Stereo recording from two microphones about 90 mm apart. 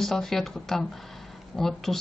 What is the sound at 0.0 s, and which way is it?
Speech, 5° left (ahead or behind).